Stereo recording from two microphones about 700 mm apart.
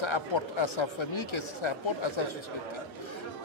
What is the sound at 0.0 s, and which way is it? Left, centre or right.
Speech, left.